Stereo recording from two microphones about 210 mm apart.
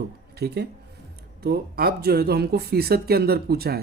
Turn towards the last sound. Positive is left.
turn(degrees=-50)  # may be behind; listen again after turning